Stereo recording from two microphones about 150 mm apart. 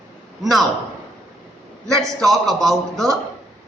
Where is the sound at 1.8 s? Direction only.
20° right (ahead or behind).